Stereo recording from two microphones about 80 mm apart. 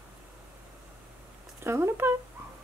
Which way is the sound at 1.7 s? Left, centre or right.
Right.